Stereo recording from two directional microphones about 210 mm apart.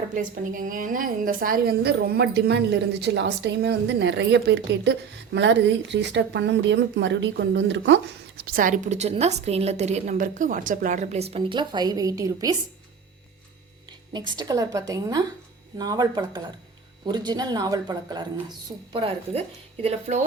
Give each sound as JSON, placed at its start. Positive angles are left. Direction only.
{"t": 0.1, "sound": "a woman's voice", "side_deg": -40}
{"t": 14.1, "sound": "a woman's voice", "side_deg": -20}